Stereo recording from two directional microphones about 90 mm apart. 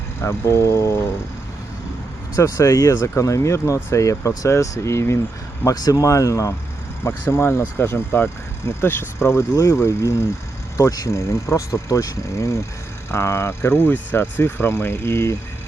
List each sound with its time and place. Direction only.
0.2 s speech: 30° left (ahead or behind)
2.3 s speech: 35° left (ahead or behind)
5.6 s speech: 45° left (ahead or behind)